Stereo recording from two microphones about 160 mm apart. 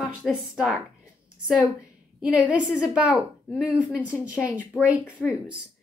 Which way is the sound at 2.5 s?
5° right (ahead or behind).